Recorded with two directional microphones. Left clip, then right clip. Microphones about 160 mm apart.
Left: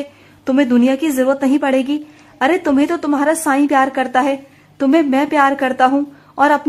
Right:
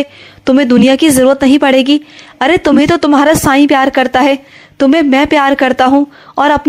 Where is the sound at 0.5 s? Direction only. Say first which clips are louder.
Right 6 dB; 30° right (ahead or behind).